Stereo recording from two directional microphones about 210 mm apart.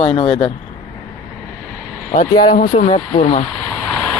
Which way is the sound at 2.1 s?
35° left (ahead or behind).